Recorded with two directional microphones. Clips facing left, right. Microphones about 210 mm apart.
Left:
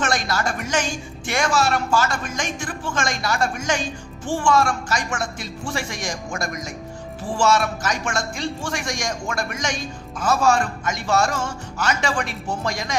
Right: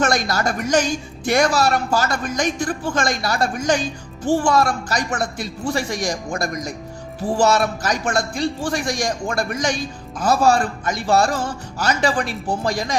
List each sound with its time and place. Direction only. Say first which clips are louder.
0.0 s speech: right 4 dB; 40° right (ahead or behind)